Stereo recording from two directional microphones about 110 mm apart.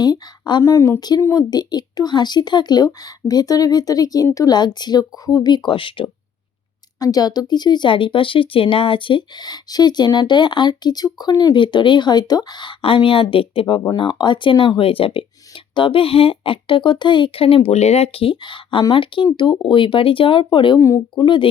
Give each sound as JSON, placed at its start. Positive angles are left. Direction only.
{"t": 0.0, "sound": "a woman's voice", "side_deg": 40}
{"t": 0.6, "sound": "speech", "side_deg": 25}
{"t": 7.0, "sound": "speech", "side_deg": 35}
{"t": 14.1, "sound": "speech", "side_deg": 45}
{"t": 18.3, "sound": "speech", "side_deg": 45}
{"t": 20.7, "sound": "speech", "side_deg": 30}
{"t": 21.2, "sound": "speech", "side_deg": 45}